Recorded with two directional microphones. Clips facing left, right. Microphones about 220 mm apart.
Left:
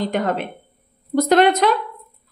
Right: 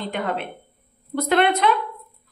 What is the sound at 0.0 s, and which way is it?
A woman's voice, 40° left (ahead or behind).